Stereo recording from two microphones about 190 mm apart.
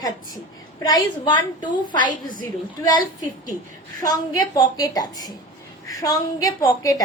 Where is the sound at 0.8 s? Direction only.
20° left (ahead or behind).